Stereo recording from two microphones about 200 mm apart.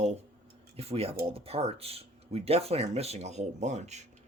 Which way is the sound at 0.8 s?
30° right (ahead or behind).